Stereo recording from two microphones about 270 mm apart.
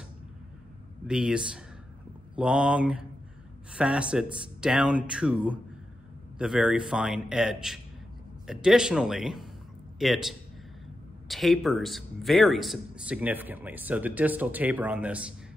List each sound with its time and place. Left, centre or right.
1.0 s a man's voice: centre